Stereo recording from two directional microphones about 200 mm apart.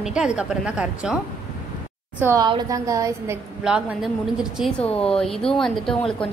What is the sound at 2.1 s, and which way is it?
A woman's voice, 10° right (ahead or behind).